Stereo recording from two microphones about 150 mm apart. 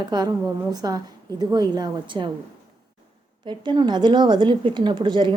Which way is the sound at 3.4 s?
30° right (ahead or behind).